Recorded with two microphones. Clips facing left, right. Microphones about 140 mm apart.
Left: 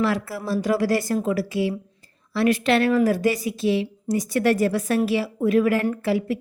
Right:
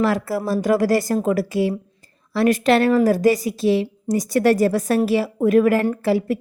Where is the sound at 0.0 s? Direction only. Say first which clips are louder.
Right 4 dB; 40° right (ahead or behind).